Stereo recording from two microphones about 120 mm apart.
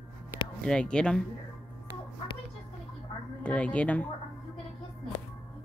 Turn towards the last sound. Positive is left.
turn(degrees=10)  # may be behind; listen again after turning